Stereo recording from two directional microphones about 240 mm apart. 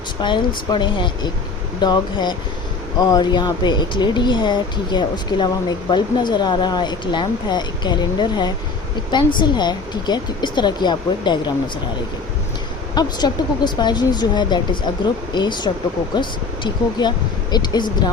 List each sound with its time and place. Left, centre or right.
0.2 s speech: centre
12.9 s speech: centre